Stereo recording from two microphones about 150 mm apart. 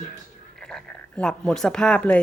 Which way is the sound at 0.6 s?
5° left (ahead or behind).